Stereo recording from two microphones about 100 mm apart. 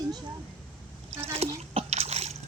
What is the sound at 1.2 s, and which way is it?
Splash, 90° right.